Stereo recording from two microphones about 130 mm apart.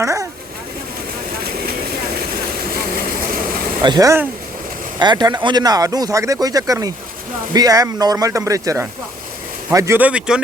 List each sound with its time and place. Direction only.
0.0 s speech: 25° right (ahead or behind)
2.9 s vehicle: 90° right
3.8 s speech: 30° right (ahead or behind)
10.0 s speech: 10° right (ahead or behind)